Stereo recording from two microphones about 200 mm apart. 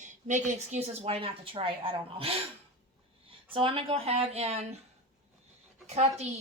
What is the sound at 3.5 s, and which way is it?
Speech, 25° right (ahead or behind).